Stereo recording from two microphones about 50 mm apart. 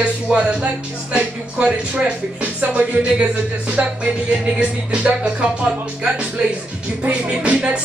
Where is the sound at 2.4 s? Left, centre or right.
Right.